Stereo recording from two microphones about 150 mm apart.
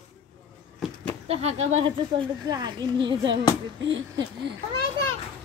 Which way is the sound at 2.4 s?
25° right (ahead or behind).